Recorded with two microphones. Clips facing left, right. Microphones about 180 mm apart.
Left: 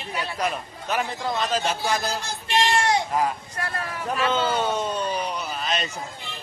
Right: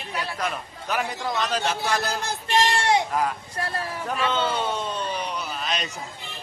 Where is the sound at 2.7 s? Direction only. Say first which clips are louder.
Even; 25° right (ahead or behind).